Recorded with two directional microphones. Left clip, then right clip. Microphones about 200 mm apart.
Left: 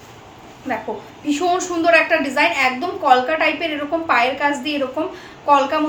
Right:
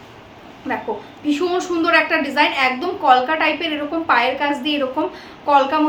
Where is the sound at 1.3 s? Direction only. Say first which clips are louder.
Left 1 dB; 10° right (ahead or behind).